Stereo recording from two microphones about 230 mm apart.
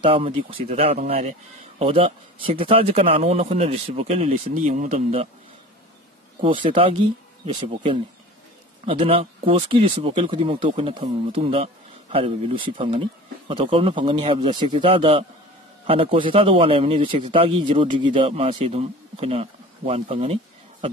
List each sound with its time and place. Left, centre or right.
0.0 s a man's voice: right
6.4 s a man's voice: right